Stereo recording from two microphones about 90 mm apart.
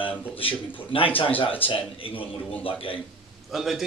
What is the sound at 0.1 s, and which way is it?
Speech, 20° left (ahead or behind).